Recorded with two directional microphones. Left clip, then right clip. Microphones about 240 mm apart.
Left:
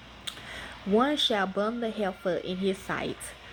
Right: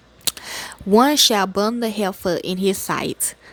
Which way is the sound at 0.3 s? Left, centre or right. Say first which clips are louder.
Right 11 dB; right.